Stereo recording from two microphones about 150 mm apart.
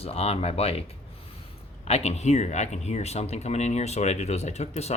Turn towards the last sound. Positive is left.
turn(degrees=45)  # may be behind; listen again after turning